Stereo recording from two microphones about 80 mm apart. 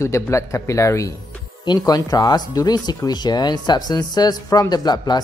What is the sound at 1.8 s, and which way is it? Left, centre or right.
Speech, left.